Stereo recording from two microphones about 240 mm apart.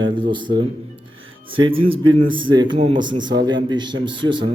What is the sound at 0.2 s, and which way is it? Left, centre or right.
Speech, centre.